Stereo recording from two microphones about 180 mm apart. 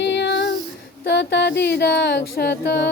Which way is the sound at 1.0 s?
75° left (ahead or behind).